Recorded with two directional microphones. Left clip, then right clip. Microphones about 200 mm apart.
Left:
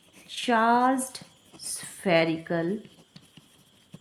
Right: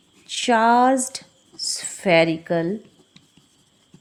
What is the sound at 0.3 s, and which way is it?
Speech, 30° right (ahead or behind).